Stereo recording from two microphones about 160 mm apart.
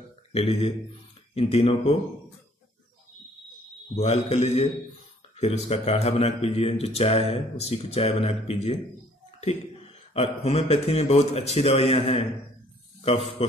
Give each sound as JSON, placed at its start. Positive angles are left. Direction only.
{"t": 0.3, "sound": "speech", "side_deg": 40}
{"t": 3.9, "sound": "speech", "side_deg": 40}
{"t": 10.1, "sound": "speech", "side_deg": 40}
{"t": 13.4, "sound": "speech", "side_deg": 40}